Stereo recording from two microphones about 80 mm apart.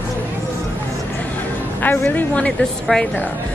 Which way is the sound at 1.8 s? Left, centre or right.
Left.